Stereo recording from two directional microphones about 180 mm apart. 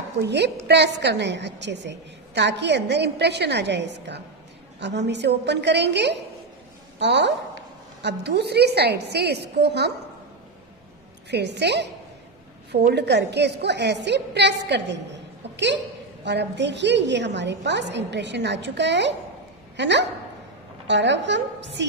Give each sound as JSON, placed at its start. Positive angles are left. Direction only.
{"t": 0.2, "sound": "a woman's voice", "side_deg": -70}
{"t": 11.2, "sound": "a woman's voice", "side_deg": -70}